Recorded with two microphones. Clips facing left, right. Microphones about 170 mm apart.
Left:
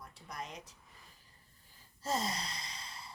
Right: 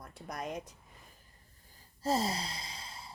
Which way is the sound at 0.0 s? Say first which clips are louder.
Right 5 dB; 50° right (ahead or behind).